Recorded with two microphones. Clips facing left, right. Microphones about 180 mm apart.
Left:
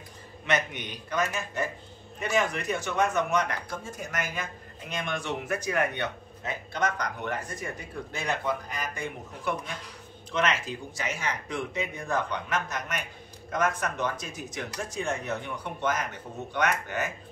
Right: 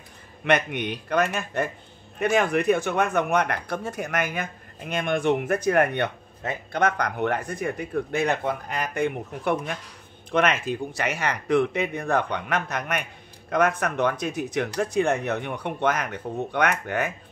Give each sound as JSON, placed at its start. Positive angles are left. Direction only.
{"t": 0.5, "sound": "speech", "side_deg": -60}